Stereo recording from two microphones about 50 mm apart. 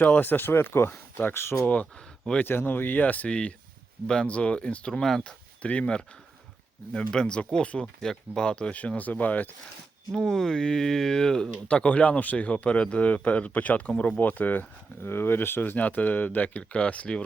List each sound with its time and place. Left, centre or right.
0.0 s speech: left
2.4 s speech: left
3.2 s speech: left
9.0 s speech: left
10.2 s speech: centre
11.5 s speech: left
15.0 s speech: left